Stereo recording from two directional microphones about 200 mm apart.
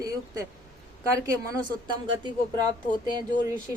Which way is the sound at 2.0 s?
20° right (ahead or behind).